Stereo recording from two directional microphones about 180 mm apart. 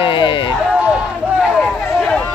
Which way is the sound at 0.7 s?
5° right (ahead or behind).